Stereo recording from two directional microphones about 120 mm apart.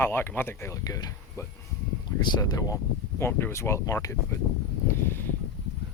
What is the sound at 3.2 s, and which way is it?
Speech, 20° left (ahead or behind).